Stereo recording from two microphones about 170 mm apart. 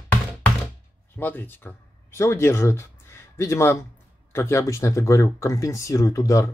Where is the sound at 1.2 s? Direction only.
10° left (ahead or behind).